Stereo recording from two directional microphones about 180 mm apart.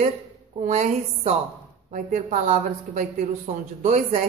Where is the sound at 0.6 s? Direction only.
40° right (ahead or behind).